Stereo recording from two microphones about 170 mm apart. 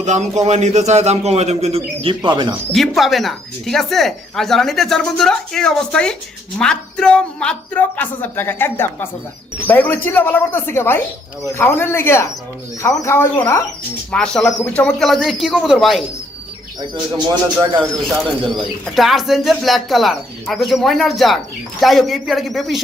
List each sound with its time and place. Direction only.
0.0 s a man's voice: 45° right (ahead or behind); by 2.6 s 25° right (ahead or behind)
2.7 s speech: centre (ahead or behind); by 13.6 s 15° left (ahead or behind)
14.1 s speech: 5° left (ahead or behind)
16.8 s speech: 25° right (ahead or behind)
18.5 s speech: centre (ahead or behind)